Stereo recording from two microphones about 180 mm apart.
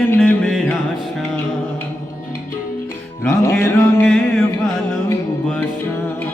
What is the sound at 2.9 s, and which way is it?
Music, 15° left (ahead or behind).